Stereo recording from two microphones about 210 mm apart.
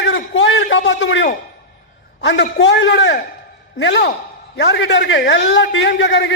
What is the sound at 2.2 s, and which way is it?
A man's voice, 60° left (ahead or behind).